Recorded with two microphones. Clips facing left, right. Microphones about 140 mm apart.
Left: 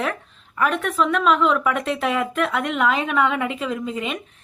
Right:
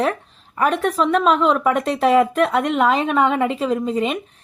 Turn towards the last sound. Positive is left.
turn(degrees=-35)  # may be behind; listen again after turning